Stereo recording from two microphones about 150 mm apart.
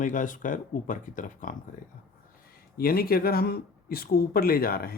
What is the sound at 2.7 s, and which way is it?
Speech, 85° left.